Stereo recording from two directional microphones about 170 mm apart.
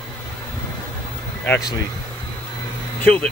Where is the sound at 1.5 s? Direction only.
20° left (ahead or behind).